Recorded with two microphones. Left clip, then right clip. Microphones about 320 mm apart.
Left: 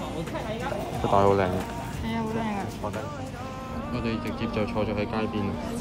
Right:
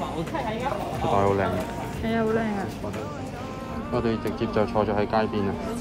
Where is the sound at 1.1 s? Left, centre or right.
Centre.